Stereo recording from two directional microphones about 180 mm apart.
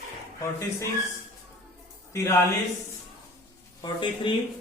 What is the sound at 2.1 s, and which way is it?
Speech, 15° left (ahead or behind).